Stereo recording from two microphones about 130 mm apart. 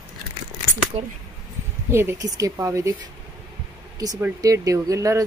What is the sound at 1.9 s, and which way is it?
Speech, 20° right (ahead or behind).